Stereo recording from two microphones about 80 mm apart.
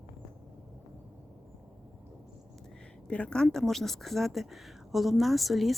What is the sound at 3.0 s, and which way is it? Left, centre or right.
Speech, centre.